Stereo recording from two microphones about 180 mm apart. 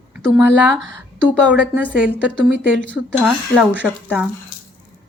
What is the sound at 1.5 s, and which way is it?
Speech, 10° right (ahead or behind).